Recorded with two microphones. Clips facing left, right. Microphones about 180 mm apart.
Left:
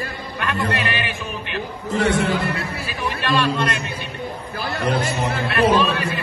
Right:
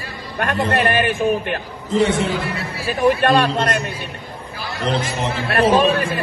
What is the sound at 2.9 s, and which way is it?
A man's voice, 55° right (ahead or behind).